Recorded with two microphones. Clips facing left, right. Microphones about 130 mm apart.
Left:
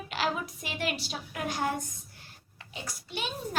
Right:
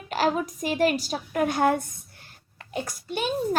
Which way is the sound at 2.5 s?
50° right (ahead or behind).